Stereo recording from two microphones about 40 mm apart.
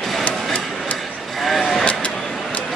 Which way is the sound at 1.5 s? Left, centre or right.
Centre.